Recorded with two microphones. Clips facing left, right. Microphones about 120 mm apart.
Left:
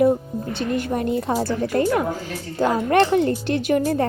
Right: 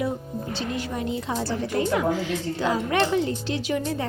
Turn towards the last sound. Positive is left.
turn(degrees=50)  # may be behind; listen again after turning